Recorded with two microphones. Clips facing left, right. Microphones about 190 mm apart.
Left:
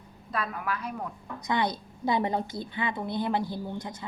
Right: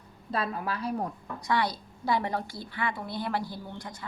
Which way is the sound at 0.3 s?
30° right (ahead or behind).